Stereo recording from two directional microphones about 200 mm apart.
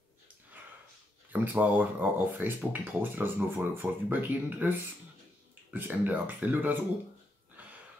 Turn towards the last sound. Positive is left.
turn(degrees=-10)  # may be behind; listen again after turning